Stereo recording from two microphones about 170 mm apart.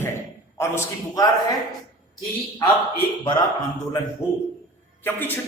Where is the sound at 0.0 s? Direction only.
15° left (ahead or behind).